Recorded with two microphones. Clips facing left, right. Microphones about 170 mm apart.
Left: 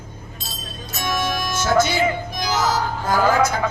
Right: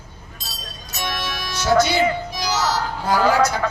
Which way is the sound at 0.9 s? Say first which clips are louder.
Left 4 dB; 50° left (ahead or behind).